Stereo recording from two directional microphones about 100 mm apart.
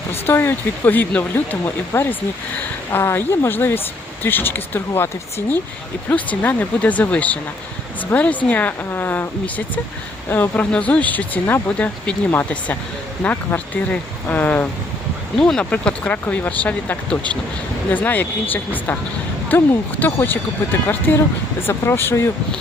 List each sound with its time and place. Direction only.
0.1 s speech: 25° left (ahead or behind)
15.4 s speech: 10° left (ahead or behind); by 22.3 s 25° left (ahead or behind)